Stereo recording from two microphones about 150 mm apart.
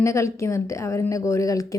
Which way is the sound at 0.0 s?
20° left (ahead or behind).